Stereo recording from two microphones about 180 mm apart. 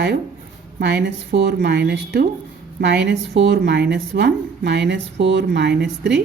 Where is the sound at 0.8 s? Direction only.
70° right (ahead or behind).